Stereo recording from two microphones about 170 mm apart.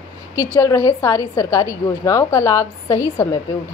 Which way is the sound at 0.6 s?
15° left (ahead or behind).